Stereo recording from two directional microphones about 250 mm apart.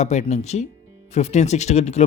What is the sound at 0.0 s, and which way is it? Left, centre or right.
Speech, left.